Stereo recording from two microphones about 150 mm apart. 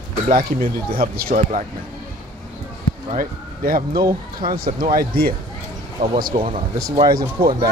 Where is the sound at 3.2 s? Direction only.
75° right (ahead or behind).